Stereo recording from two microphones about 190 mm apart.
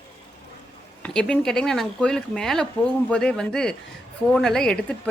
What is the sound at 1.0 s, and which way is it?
A woman's voice, 5° left (ahead or behind).